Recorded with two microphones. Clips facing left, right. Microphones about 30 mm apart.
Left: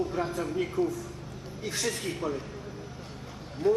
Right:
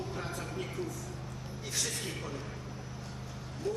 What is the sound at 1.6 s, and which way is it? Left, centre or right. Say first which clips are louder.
Speech: left 6 dB; centre.